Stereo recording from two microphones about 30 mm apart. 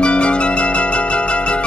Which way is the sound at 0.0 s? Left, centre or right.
Left.